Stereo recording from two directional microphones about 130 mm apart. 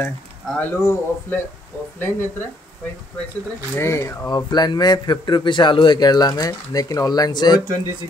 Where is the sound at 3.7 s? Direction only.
20° left (ahead or behind).